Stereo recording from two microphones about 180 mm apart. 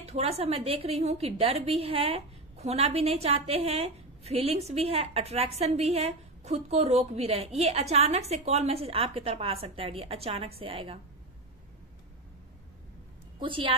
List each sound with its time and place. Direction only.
0.0 s a woman's voice: 35° right (ahead or behind)
13.4 s a woman's voice: 30° right (ahead or behind)